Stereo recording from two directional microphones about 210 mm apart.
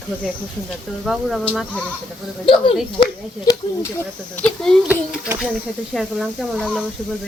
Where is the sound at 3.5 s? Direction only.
20° left (ahead or behind).